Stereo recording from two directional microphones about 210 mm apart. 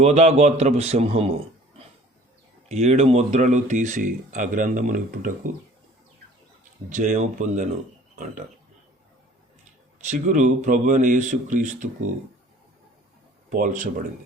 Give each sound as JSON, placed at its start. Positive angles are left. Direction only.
{"t": 0.0, "sound": "speech", "side_deg": -30}
{"t": 2.6, "sound": "speech", "side_deg": -30}
{"t": 6.9, "sound": "speech", "side_deg": -35}
{"t": 10.0, "sound": "speech", "side_deg": -35}
{"t": 13.5, "sound": "speech", "side_deg": -40}